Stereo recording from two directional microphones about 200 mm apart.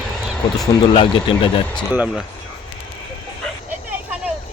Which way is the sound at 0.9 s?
25° left (ahead or behind).